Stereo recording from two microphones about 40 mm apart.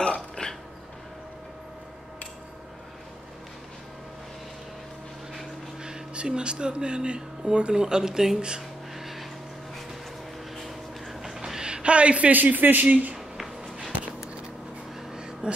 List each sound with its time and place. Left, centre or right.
0.0 s burping: left
5.8 s speech: centre
8.9 s vehicle: centre
10.6 s a sound: centre; by 12.3 s right
12.3 s speech: right
12.8 s speech: right
15.4 s a sound: right